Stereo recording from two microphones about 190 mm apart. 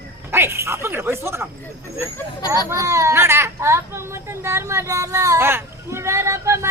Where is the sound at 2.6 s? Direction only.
15° right (ahead or behind).